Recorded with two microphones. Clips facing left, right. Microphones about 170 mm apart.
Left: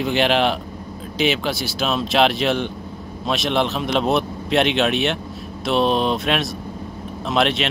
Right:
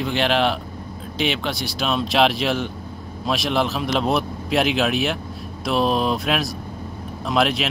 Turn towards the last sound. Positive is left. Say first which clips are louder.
# left 1 dB
turn(degrees=0)  # may be behind; listen again after turning